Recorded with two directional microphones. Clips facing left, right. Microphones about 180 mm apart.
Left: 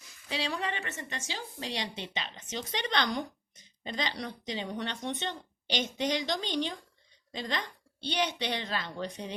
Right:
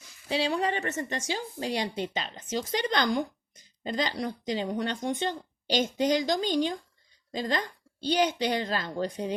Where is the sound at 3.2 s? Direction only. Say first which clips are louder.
Right 5 dB; 45° right (ahead or behind).